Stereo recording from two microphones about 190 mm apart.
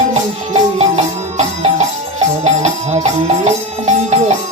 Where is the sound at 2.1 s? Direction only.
35° right (ahead or behind).